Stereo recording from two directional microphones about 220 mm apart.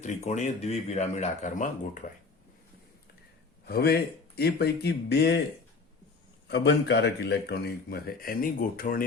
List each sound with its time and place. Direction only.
0.0 s speech: 35° left (ahead or behind)
3.7 s a man's voice: 45° left (ahead or behind)
6.5 s a man's voice: 50° left (ahead or behind)